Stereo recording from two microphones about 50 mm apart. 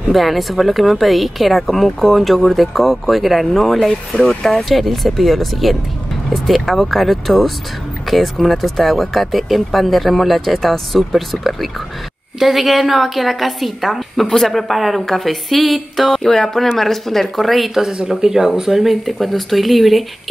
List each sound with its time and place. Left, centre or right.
0.1 s speech: centre
4.2 s speech: centre
4.5 s speech: centre